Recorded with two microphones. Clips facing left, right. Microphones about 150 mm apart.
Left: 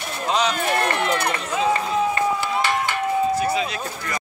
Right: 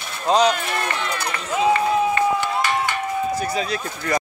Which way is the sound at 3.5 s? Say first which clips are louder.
Left 1 dB; 40° right (ahead or behind).